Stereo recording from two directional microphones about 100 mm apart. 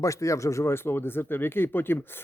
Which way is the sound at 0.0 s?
30° left (ahead or behind).